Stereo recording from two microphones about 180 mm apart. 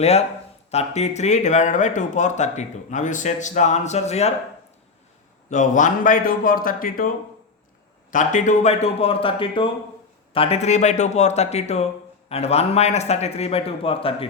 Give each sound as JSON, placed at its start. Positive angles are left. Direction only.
{"t": 0.0, "sound": "speech", "side_deg": 35}
{"t": 5.5, "sound": "a man's voice", "side_deg": 45}
{"t": 8.1, "sound": "speech", "side_deg": 45}